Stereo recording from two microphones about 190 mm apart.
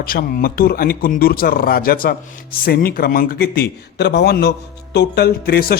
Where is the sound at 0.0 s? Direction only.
50° left (ahead or behind).